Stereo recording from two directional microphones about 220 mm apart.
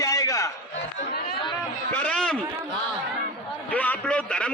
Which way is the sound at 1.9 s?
5° left (ahead or behind).